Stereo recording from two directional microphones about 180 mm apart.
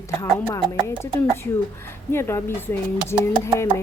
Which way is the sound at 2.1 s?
15° left (ahead or behind).